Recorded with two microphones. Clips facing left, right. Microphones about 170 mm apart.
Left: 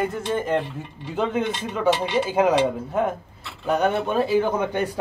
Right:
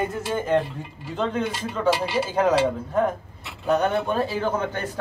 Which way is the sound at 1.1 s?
10° left (ahead or behind).